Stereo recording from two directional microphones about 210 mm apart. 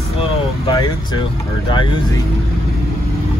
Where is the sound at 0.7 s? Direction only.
20° left (ahead or behind).